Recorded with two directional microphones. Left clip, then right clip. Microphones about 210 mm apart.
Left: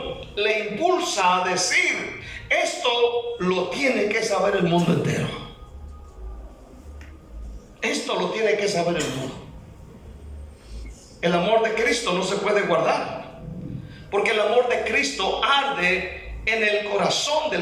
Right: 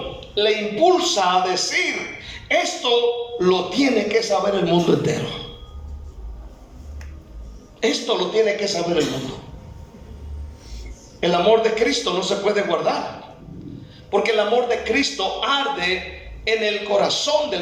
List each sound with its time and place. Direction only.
0.3 s a man's voice: 20° right (ahead or behind)
7.8 s a man's voice: 20° right (ahead or behind)
11.2 s a man's voice: 20° right (ahead or behind)
14.1 s a man's voice: 20° right (ahead or behind)